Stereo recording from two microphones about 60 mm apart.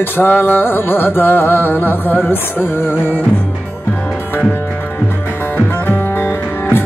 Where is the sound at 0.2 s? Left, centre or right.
Left.